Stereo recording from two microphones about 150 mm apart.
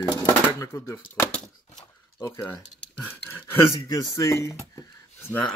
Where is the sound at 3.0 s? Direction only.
15° left (ahead or behind).